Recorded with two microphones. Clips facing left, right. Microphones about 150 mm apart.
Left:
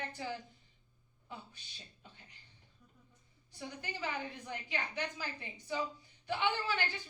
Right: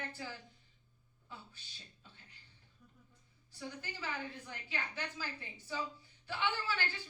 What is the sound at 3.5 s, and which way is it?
A woman's voice, 15° left (ahead or behind).